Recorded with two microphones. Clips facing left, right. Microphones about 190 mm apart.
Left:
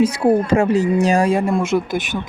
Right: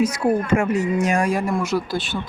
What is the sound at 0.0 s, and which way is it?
Speech, 30° left (ahead or behind).